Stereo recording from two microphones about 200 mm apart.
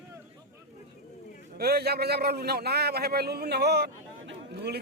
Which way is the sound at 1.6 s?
50° right (ahead or behind).